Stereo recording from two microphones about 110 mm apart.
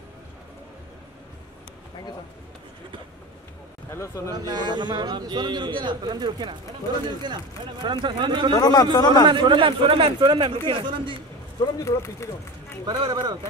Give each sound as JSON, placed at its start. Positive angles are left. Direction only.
{"t": 3.9, "sound": "speech", "side_deg": 25}
{"t": 4.3, "sound": "a man's voice", "side_deg": -35}
{"t": 8.5, "sound": "speech", "side_deg": 35}
{"t": 9.3, "sound": "a man's voice", "side_deg": -50}
{"t": 11.6, "sound": "speech", "side_deg": 25}
{"t": 12.8, "sound": "a man's voice", "side_deg": -45}